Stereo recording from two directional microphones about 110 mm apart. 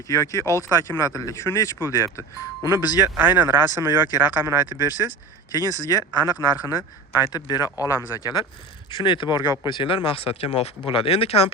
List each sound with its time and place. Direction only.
0.1 s speech: 30° left (ahead or behind)
2.6 s speech: 30° right (ahead or behind)
3.2 s speech: 20° right (ahead or behind)
5.5 s speech: 35° left (ahead or behind); by 11.5 s 65° left (ahead or behind)